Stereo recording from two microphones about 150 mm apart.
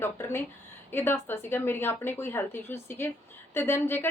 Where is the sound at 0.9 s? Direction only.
15° left (ahead or behind).